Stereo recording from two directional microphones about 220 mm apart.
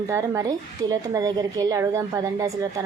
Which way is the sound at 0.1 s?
15° right (ahead or behind).